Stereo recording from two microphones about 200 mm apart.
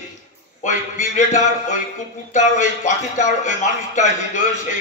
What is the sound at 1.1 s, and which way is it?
A man's voice, 40° left (ahead or behind).